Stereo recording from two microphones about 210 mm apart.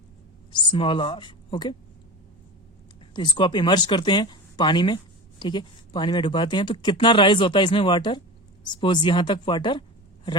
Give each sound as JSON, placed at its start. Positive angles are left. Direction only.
{"t": 0.5, "sound": "a woman's voice", "side_deg": 25}
{"t": 3.1, "sound": "speech", "side_deg": 20}